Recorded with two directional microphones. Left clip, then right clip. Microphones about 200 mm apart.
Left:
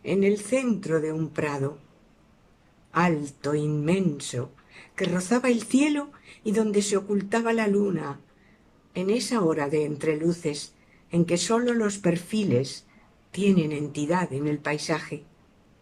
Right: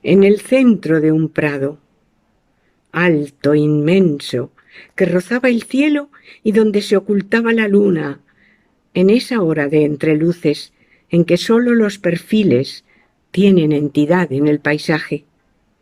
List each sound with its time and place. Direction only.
0.0 s speech: 45° right (ahead or behind)
2.9 s speech: 45° right (ahead or behind)